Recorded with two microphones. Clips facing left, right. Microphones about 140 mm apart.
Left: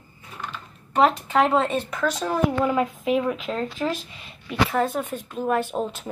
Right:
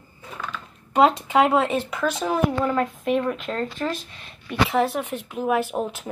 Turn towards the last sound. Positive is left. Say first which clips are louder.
# right 1 dB
turn(degrees=-10)  # may be behind; listen again after turning